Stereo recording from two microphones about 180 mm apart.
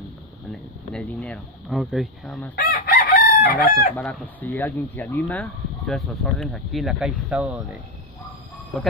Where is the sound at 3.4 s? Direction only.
55° left (ahead or behind).